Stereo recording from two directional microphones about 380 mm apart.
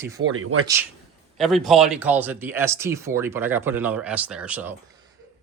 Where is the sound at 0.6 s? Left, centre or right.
Centre.